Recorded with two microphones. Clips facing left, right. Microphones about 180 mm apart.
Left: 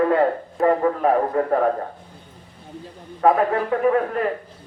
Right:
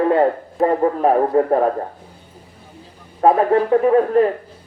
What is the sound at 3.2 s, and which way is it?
Speech, 30° right (ahead or behind).